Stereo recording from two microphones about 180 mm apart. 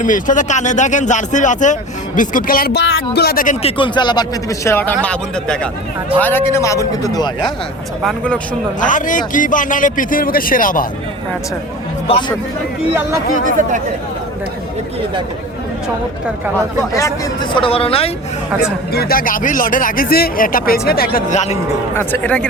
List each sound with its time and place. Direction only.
0.0 s speech: 45° left (ahead or behind)
3.6 s speech: 30° left (ahead or behind); by 4.9 s 10° left (ahead or behind)
6.1 s a man's voice: 10° left (ahead or behind)
8.0 s speech: 5° left (ahead or behind)
8.8 s speech: 45° left (ahead or behind)
13.4 s speech: 45° right (ahead or behind)
17.5 s speech: 30° left (ahead or behind)
18.9 s speech: 55° left (ahead or behind)
21.9 s a man's voice: 10° left (ahead or behind)